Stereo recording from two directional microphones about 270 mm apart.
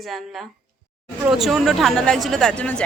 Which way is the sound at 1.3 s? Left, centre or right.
Centre.